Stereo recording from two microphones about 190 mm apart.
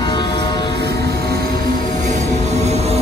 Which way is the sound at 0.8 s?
60° right (ahead or behind).